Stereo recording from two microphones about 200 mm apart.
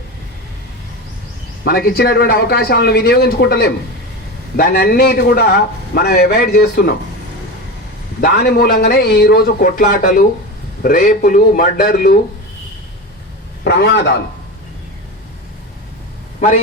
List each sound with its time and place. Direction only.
1.6 s a man's voice: 50° left (ahead or behind)
8.2 s a man's voice: 50° left (ahead or behind)
13.7 s a man's voice: 60° left (ahead or behind)